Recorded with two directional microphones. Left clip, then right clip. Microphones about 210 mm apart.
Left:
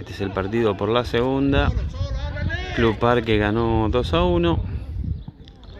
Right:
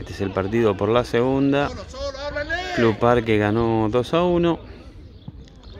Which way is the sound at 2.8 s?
Centre (ahead or behind).